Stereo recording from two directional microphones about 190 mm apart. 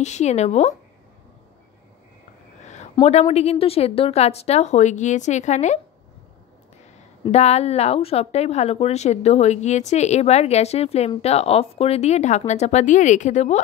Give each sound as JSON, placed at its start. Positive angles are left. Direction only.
{"t": 0.0, "sound": "a woman's voice", "side_deg": 35}
{"t": 2.6, "sound": "a woman's voice", "side_deg": 35}
{"t": 7.2, "sound": "a woman's voice", "side_deg": 35}